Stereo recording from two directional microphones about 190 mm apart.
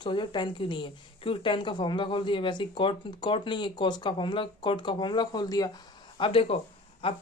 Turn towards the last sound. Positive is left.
turn(degrees=25)  # may be behind; listen again after turning